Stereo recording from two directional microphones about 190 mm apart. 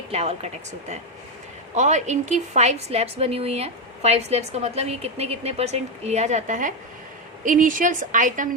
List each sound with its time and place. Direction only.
0.1 s a woman's voice: 35° right (ahead or behind)